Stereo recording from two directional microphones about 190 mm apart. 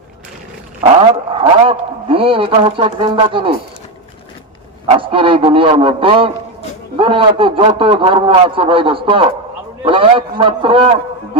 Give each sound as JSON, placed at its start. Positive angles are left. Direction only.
{"t": 0.8, "sound": "speech", "side_deg": -30}
{"t": 4.9, "sound": "speech", "side_deg": -25}